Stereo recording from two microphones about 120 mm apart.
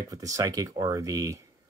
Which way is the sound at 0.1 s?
30° right (ahead or behind).